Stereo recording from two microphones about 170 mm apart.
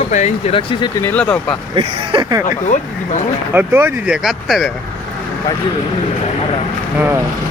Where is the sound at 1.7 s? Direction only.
25° right (ahead or behind).